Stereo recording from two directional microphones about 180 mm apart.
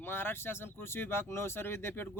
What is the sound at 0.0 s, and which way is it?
Speech, 10° left (ahead or behind).